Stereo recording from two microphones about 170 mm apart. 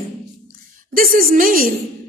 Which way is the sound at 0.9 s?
55° right (ahead or behind).